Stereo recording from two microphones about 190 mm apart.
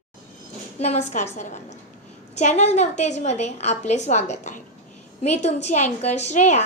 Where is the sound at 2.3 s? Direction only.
35° left (ahead or behind).